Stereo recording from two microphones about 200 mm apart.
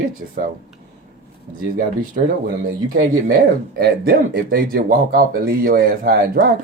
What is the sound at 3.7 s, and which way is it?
Speech, 50° right (ahead or behind).